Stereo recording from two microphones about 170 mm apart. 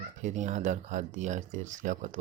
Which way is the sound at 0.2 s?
45° right (ahead or behind).